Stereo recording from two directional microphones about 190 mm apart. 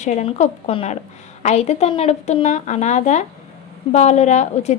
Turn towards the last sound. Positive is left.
turn(degrees=40)  # may be behind; listen again after turning